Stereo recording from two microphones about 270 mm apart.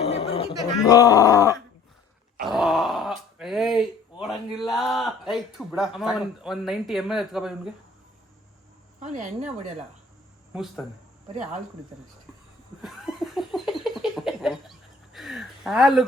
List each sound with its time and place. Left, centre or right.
0.0 s a sound: left
0.3 s speech: centre
2.4 s grunt: centre
4.2 s a man's voice: centre
9.0 s speech: right
10.5 s a man's voice: centre
12.8 s a sound: centre